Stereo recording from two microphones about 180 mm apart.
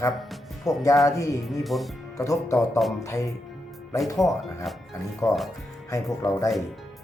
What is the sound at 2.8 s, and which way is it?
Speech, centre (ahead or behind).